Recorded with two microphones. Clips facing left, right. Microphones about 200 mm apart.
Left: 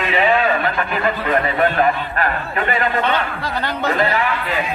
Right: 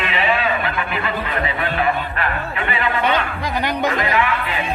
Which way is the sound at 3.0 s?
15° right (ahead or behind).